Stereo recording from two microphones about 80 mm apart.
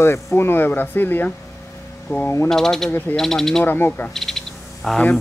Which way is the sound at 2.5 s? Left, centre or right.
Centre.